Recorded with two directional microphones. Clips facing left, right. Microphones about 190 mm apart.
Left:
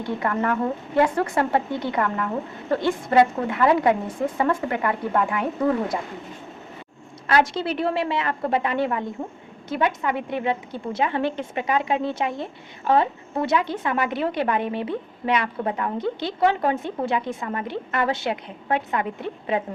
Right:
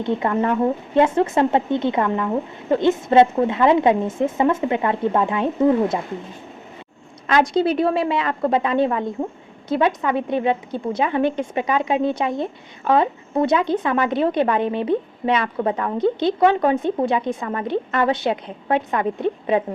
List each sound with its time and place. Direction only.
0.0 s speech: 20° right (ahead or behind)
7.3 s speech: 20° right (ahead or behind)